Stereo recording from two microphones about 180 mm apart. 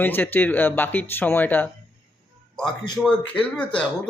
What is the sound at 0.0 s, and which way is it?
Speech, 10° left (ahead or behind).